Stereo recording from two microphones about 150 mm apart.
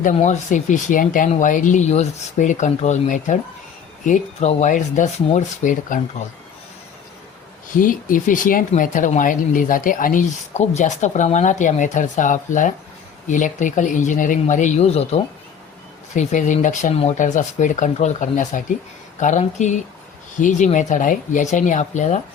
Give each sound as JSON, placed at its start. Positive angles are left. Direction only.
{"t": 0.0, "sound": "speech", "side_deg": 50}
{"t": 7.8, "sound": "speech", "side_deg": 65}
{"t": 17.2, "sound": "speech", "side_deg": 55}